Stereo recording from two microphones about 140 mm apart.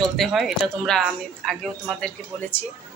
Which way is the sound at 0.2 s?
Centre (ahead or behind).